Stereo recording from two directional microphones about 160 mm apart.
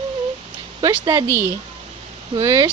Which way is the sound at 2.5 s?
15° right (ahead or behind).